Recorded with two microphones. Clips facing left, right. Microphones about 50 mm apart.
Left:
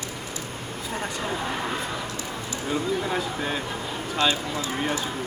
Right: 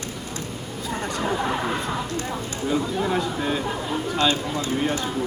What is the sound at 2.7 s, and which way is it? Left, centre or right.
Speech, centre.